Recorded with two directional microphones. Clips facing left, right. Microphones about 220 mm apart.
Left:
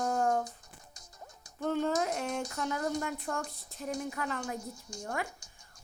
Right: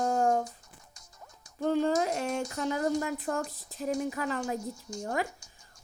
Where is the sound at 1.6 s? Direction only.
35° right (ahead or behind).